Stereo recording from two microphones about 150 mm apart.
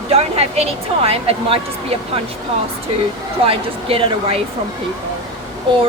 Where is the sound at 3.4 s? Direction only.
40° right (ahead or behind).